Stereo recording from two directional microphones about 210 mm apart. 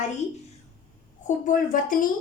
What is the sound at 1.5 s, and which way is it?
Speech, 40° left (ahead or behind).